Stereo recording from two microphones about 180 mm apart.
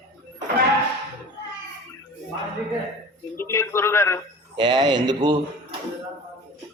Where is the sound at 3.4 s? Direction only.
15° left (ahead or behind).